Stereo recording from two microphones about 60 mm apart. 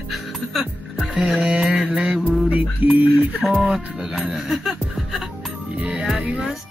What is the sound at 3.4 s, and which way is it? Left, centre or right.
Speech, centre.